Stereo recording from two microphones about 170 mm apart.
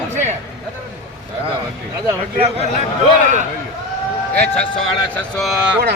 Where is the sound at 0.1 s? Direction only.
40° right (ahead or behind).